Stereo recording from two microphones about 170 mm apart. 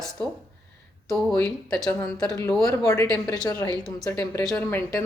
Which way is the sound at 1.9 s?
20° left (ahead or behind).